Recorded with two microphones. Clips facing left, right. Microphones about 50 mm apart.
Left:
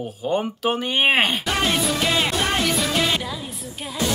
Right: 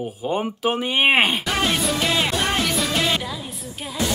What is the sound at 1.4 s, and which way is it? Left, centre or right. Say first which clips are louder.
Music: even; centre.